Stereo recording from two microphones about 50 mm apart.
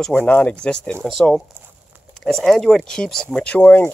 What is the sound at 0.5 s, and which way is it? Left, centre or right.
Speech, centre.